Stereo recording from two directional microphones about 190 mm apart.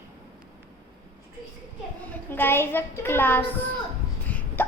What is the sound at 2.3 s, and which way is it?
A woman's voice, 10° left (ahead or behind).